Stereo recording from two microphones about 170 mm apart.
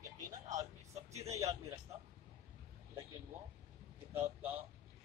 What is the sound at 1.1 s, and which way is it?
Speech, 20° right (ahead or behind).